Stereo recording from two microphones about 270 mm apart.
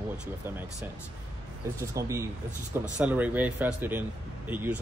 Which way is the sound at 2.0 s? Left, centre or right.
Centre.